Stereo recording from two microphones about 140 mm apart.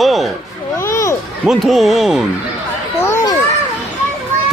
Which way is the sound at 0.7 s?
20° left (ahead or behind).